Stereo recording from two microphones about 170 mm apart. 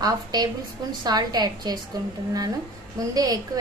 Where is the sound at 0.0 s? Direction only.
25° right (ahead or behind).